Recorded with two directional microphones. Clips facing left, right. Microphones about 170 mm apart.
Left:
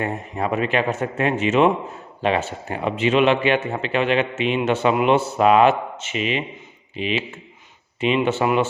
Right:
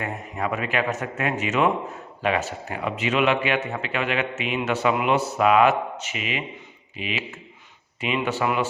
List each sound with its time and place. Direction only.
0.0 s a man's voice: 30° left (ahead or behind)